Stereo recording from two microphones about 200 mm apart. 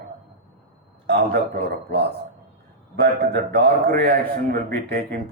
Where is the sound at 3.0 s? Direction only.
55° right (ahead or behind).